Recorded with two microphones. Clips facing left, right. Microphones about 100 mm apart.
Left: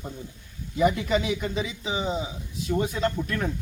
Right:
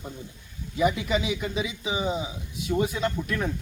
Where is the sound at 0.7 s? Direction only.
5° right (ahead or behind).